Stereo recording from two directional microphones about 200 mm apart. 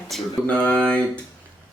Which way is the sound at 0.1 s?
5° left (ahead or behind).